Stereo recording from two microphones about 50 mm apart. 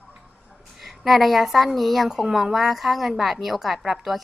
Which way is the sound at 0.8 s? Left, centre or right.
Centre.